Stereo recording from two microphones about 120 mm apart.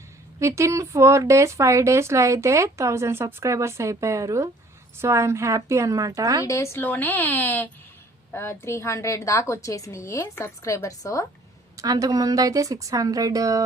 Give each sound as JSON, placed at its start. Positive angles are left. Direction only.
{"t": 0.3, "sound": "speech", "side_deg": -25}
{"t": 6.4, "sound": "a woman's voice", "side_deg": 25}
{"t": 11.8, "sound": "speech", "side_deg": -30}